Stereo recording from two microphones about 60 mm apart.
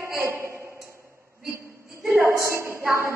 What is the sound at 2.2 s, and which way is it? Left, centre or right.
Speech, right.